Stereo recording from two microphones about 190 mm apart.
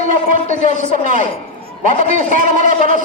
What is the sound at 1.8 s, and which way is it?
A man's voice, 45° right (ahead or behind).